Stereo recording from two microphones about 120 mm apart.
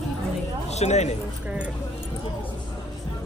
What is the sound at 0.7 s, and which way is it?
Speech, 70° left (ahead or behind).